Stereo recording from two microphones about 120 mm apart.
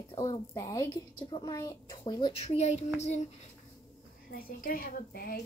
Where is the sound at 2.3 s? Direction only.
60° left (ahead or behind).